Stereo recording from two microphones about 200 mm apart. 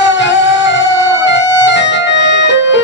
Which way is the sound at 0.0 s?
65° left (ahead or behind).